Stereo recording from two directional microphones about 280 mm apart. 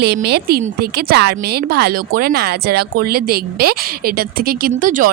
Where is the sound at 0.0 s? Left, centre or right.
Right.